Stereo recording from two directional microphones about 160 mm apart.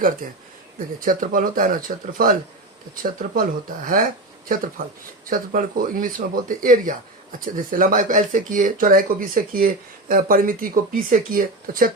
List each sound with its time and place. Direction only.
0.2 s speech: 60° right (ahead or behind)